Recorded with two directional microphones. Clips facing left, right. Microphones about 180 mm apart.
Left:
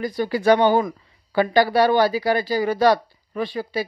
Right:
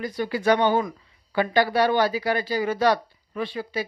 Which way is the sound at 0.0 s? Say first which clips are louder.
Left 4 dB; 35° left (ahead or behind).